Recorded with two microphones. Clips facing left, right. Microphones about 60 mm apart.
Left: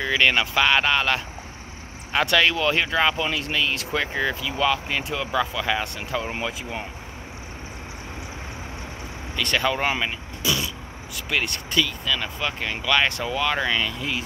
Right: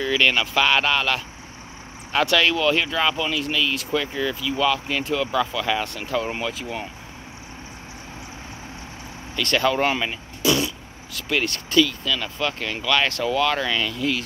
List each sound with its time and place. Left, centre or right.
0.0 s speech: centre
3.3 s speech: left
9.3 s speech: centre
11.2 s speech: centre